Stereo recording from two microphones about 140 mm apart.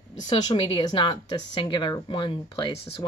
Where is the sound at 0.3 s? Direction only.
30° left (ahead or behind).